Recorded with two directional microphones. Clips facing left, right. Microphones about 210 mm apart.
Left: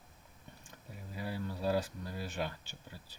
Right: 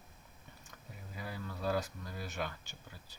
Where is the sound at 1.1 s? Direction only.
30° left (ahead or behind).